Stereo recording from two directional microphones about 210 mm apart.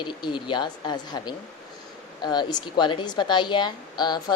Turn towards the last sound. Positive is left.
turn(degrees=20)  # may be behind; listen again after turning